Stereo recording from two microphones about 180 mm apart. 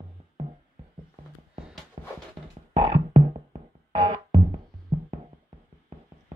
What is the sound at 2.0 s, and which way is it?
Music, 30° right (ahead or behind).